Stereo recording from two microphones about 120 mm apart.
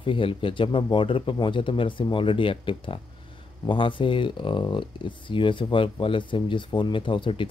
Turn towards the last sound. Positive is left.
turn(degrees=45)  # may be behind; listen again after turning